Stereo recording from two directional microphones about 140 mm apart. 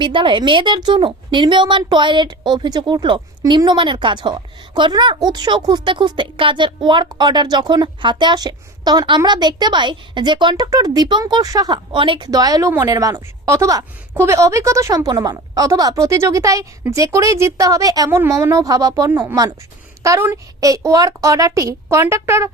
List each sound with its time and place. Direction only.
0.0 s a woman's voice: 35° right (ahead or behind); by 22.4 s 20° right (ahead or behind)